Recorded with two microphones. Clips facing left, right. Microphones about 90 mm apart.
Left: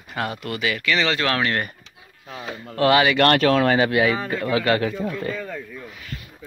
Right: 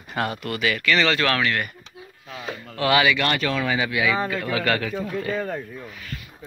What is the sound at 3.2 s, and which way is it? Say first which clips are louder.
Speech: left 7 dB; 65° left (ahead or behind).